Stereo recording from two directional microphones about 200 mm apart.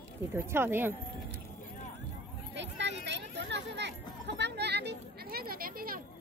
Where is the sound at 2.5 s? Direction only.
60° right (ahead or behind).